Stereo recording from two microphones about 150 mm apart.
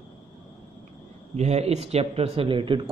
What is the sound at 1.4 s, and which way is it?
Speech, 45° right (ahead or behind).